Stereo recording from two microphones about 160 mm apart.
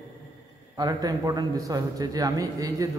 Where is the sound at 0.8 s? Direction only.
25° right (ahead or behind).